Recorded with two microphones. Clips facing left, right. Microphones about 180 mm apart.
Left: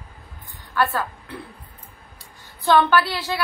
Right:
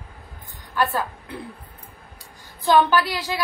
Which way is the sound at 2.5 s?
15° right (ahead or behind).